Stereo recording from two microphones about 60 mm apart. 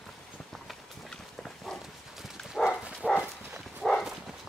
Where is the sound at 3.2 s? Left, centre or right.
Centre.